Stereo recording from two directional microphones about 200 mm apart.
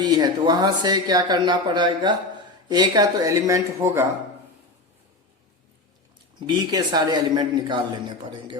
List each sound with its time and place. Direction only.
0.0 s a man's voice: 20° right (ahead or behind)
6.4 s a man's voice: 20° right (ahead or behind)